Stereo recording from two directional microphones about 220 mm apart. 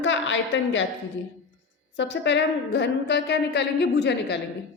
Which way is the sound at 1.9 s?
55° left (ahead or behind).